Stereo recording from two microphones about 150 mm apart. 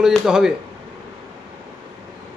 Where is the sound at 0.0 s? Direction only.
5° right (ahead or behind).